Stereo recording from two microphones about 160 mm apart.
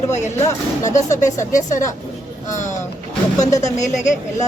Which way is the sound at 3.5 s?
20° left (ahead or behind).